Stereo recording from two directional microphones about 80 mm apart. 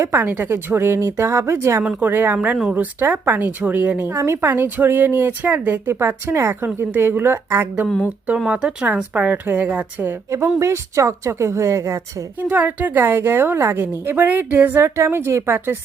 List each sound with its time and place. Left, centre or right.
0.0 s a woman's voice: right
8.4 s a woman's voice: centre
10.6 s a woman's voice: right
12.4 s speech: right